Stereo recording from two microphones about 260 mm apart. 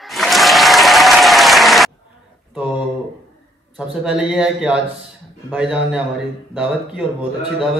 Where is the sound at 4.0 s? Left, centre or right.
Centre.